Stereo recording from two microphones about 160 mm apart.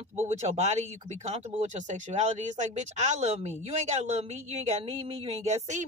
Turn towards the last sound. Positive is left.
turn(degrees=-45)  # may be behind; listen again after turning